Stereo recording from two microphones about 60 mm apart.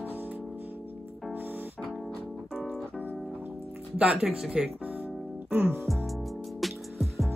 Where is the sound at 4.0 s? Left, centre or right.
Right.